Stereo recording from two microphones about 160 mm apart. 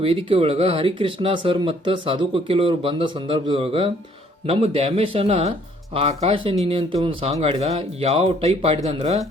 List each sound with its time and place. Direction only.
0.0 s speech: 35° right (ahead or behind)